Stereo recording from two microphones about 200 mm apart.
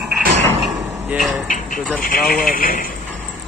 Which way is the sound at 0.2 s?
60° right (ahead or behind).